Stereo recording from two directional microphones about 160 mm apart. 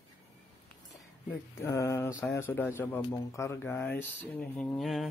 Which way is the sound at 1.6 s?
15° left (ahead or behind).